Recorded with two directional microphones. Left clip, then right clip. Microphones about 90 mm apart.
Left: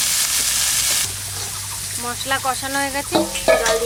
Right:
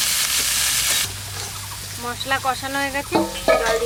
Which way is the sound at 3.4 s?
40° left (ahead or behind).